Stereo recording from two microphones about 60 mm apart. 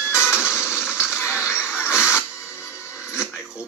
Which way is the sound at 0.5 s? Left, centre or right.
Centre.